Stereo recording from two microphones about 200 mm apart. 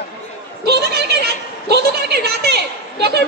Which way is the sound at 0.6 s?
55° right (ahead or behind).